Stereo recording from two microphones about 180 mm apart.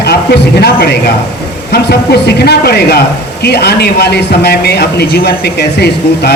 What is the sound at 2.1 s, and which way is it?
A man's voice, 65° left (ahead or behind).